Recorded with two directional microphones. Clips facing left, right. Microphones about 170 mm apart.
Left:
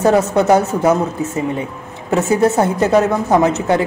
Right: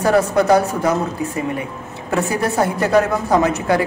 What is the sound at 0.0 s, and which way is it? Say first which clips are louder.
A woman's voice: left 2 dB; 20° left (ahead or behind).